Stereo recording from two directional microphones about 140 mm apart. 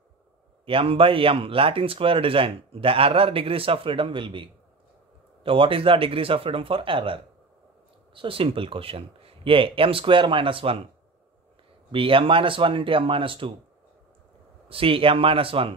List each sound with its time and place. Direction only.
0.7 s speech: 40° right (ahead or behind)
11.9 s speech: 40° right (ahead or behind)
14.7 s speech: 40° right (ahead or behind)